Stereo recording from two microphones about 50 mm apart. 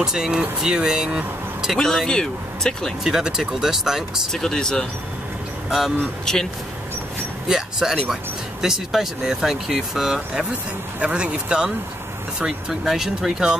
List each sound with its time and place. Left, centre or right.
0.0 s speech: centre
2.0 s speech: centre
3.0 s speech: centre
4.3 s speech: centre
5.7 s speech: centre
6.3 s speech: centre
7.4 s speech: centre
11.0 s speech: right